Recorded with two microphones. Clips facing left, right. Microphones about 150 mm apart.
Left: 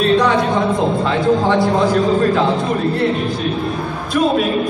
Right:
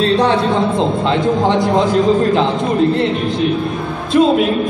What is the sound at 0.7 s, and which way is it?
A man's voice, 20° right (ahead or behind).